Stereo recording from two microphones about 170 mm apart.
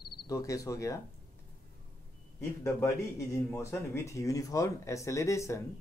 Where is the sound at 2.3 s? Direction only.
15° left (ahead or behind).